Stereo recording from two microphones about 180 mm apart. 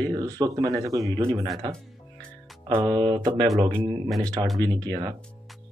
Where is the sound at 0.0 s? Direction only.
20° right (ahead or behind).